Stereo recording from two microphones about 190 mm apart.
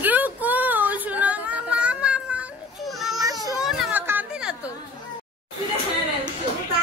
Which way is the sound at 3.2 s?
20° right (ahead or behind).